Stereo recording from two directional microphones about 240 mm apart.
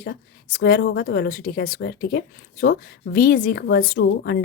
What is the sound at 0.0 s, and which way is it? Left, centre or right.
A woman's voice, left.